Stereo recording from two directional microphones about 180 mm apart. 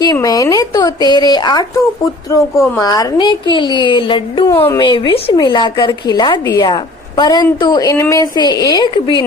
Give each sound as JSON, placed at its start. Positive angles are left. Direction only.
{"t": 0.0, "sound": "a sound", "side_deg": 20}
{"t": 2.3, "sound": "a woman's voice", "side_deg": 20}
{"t": 4.4, "sound": "speech", "side_deg": 15}
{"t": 4.8, "sound": "a woman's voice", "side_deg": 25}